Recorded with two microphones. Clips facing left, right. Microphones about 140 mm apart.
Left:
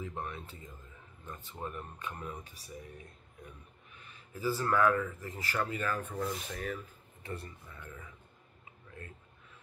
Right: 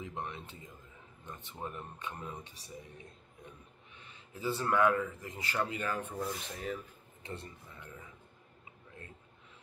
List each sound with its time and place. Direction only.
0.0 s speech: 20° right (ahead or behind)
4.0 s speech: 25° right (ahead or behind)